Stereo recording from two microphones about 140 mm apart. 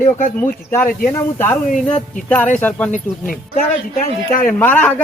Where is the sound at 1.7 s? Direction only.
65° left (ahead or behind).